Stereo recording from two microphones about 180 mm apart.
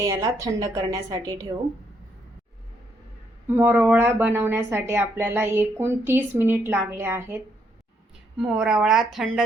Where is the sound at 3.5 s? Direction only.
10° right (ahead or behind).